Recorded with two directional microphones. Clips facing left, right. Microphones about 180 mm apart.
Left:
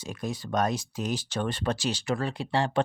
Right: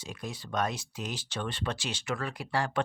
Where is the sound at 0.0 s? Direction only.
45° left (ahead or behind).